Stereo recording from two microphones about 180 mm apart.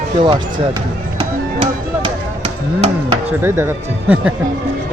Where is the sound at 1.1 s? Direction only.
30° right (ahead or behind).